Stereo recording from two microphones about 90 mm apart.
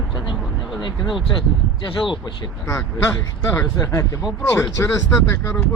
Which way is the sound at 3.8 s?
35° left (ahead or behind).